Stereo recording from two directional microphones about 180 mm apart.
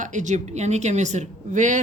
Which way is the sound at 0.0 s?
45° right (ahead or behind).